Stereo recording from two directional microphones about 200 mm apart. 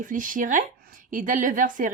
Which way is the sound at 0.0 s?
40° right (ahead or behind).